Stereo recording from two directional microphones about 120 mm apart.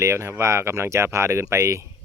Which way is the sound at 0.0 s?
25° right (ahead or behind).